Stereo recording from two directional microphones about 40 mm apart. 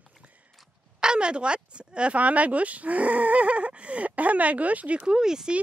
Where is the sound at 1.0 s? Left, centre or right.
Right.